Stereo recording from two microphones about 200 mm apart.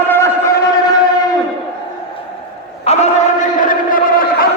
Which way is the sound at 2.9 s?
30° left (ahead or behind).